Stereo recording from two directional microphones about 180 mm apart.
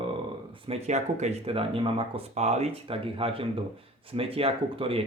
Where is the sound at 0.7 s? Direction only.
40° right (ahead or behind).